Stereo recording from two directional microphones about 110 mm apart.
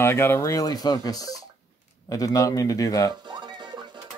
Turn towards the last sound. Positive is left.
turn(degrees=30)  # may be behind; listen again after turning